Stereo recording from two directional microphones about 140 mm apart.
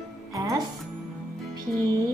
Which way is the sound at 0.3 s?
25° right (ahead or behind).